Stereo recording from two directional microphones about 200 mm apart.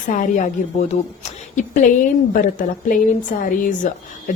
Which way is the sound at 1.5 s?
40° left (ahead or behind).